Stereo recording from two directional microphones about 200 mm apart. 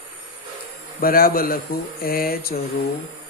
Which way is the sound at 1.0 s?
45° left (ahead or behind).